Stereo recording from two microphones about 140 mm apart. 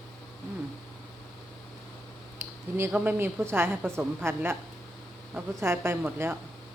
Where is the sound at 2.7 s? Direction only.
15° right (ahead or behind).